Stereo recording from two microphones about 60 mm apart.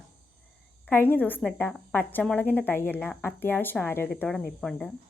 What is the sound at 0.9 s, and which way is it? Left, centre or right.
A woman's voice, left.